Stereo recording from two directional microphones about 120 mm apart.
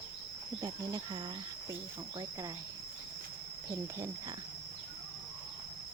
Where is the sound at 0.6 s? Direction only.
30° right (ahead or behind).